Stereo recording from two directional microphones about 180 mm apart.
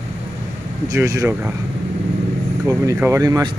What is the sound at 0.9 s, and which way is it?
Speech, 15° right (ahead or behind).